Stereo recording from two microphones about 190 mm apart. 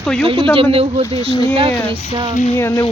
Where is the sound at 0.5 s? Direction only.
30° right (ahead or behind).